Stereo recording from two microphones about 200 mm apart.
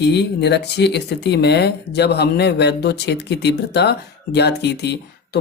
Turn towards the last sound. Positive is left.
turn(degrees=55)  # may be behind; listen again after turning